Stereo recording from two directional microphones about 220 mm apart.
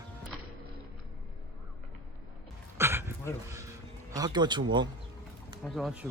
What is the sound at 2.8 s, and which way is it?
Dog, 10° right (ahead or behind).